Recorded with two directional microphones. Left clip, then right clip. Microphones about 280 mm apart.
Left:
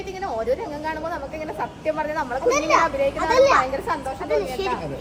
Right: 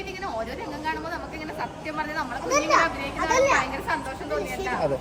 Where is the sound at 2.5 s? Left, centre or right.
Left.